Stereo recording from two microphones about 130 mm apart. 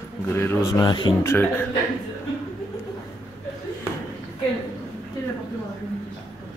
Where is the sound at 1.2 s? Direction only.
15° left (ahead or behind).